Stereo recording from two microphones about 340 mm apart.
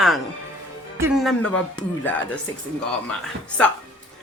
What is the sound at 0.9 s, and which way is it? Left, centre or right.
Speech, centre.